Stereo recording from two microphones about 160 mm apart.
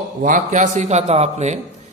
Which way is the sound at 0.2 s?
55° right (ahead or behind).